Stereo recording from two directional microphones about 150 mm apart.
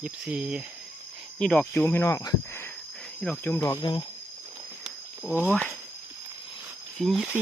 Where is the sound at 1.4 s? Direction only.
5° left (ahead or behind).